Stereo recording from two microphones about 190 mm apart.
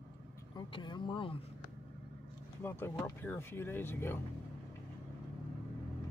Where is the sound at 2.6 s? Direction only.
10° left (ahead or behind).